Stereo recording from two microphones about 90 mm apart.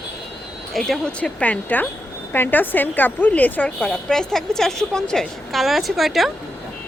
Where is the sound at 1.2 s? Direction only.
15° left (ahead or behind).